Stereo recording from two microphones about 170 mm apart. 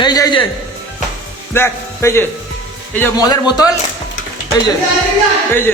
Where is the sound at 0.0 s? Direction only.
25° left (ahead or behind).